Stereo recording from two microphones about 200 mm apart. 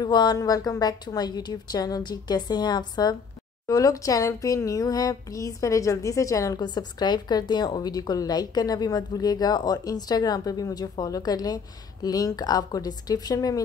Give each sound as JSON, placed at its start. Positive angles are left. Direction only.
{"t": 0.0, "sound": "speech", "side_deg": 20}